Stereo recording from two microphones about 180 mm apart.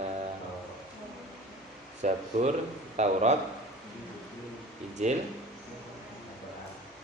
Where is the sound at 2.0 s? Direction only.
40° right (ahead or behind).